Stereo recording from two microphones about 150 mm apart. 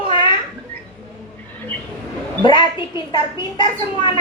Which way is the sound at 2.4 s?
30° left (ahead or behind).